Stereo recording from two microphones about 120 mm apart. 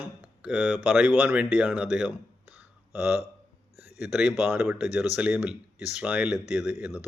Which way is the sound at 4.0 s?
10° right (ahead or behind).